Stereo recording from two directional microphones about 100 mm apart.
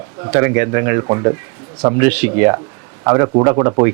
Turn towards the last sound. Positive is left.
turn(degrees=-30)  # may be behind; listen again after turning